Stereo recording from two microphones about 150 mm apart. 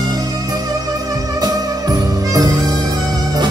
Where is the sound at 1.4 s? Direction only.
25° right (ahead or behind).